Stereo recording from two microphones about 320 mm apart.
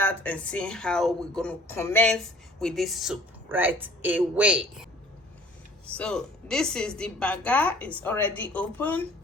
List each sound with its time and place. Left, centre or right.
0.0 s speech: centre
6.0 s speech: centre